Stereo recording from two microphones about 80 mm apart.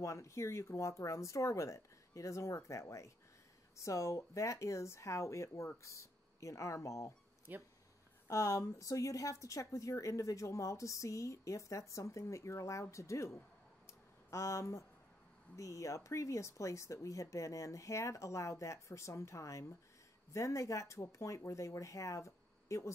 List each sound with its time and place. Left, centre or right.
0.0 s speech: left
7.5 s speech: right
8.3 s speech: left